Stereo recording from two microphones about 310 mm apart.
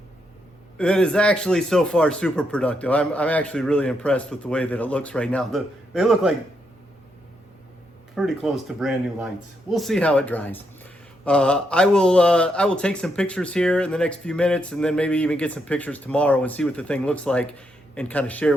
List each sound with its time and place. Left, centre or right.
0.8 s speech: centre
8.1 s speech: centre